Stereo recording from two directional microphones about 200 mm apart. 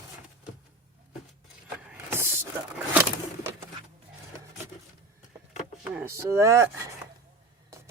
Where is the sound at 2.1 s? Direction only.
10° right (ahead or behind).